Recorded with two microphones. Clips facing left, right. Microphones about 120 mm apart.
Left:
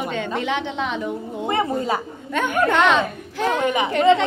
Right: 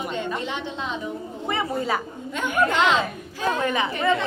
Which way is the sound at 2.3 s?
60° left (ahead or behind).